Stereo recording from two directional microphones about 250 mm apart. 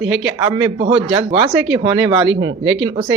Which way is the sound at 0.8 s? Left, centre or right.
Centre.